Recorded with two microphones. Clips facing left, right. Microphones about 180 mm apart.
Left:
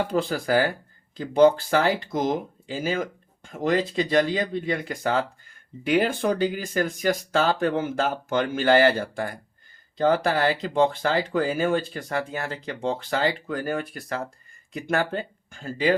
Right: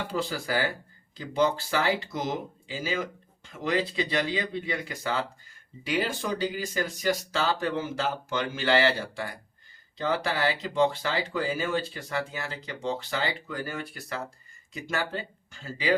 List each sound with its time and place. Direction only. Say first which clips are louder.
0.2 s speech: left 5 dB; 50° left (ahead or behind)